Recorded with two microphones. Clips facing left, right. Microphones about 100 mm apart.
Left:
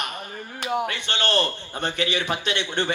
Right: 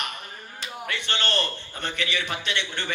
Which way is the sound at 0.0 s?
45° left (ahead or behind).